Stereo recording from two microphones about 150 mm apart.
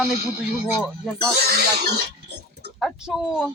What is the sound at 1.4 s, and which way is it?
Speech, 90° right.